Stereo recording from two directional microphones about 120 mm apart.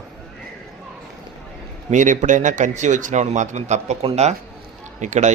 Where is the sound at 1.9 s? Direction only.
90° right; by 4.4 s 65° right (ahead or behind).